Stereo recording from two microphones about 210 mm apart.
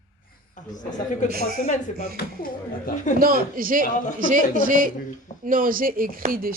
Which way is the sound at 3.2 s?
45° right (ahead or behind).